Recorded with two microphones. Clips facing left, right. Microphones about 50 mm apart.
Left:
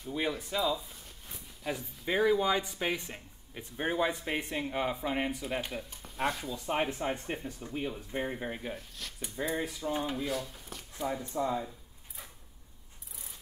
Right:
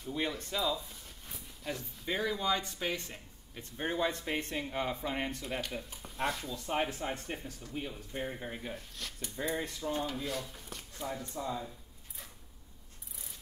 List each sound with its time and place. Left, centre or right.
0.0 s speech: centre
1.2 s a sound: centre
1.7 s speech: centre
11.1 s speech: centre